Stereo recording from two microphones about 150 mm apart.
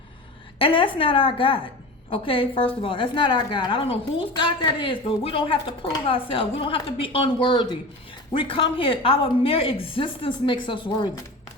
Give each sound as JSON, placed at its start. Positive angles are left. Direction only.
{"t": 0.6, "sound": "a woman's voice", "side_deg": 35}